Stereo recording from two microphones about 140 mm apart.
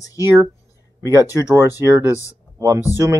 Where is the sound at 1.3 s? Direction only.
20° right (ahead or behind).